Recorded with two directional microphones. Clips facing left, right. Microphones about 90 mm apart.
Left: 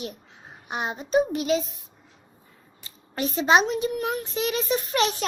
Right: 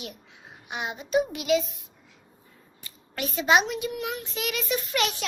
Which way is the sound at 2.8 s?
35° left (ahead or behind).